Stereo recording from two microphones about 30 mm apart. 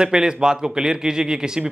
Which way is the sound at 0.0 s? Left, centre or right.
Right.